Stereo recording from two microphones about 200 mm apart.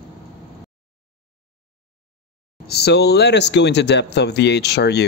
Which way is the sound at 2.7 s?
55° left (ahead or behind).